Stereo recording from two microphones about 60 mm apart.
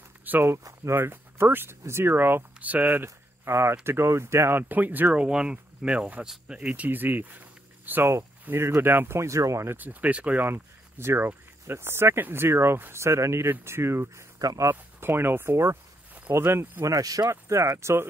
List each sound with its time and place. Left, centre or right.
0.3 s speech: right
8.5 s speech: right
9.3 s speech: right
9.8 s speech: right
10.4 s speech: right
16.8 s speech: right
17.3 s speech: right